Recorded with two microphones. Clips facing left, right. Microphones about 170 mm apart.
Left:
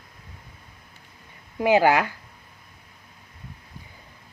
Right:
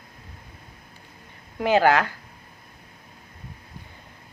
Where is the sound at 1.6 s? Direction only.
15° left (ahead or behind).